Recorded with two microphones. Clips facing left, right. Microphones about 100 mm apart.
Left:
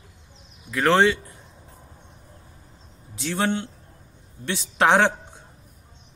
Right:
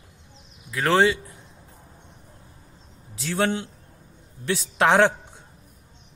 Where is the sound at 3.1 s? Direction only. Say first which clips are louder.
Even; centre (ahead or behind).